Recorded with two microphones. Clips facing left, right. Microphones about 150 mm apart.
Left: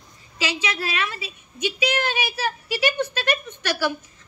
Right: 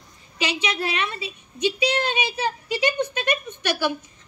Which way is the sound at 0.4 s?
15° right (ahead or behind).